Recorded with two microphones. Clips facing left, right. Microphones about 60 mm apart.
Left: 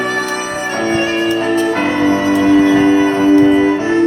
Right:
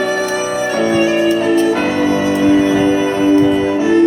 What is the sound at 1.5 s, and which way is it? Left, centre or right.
Music, left.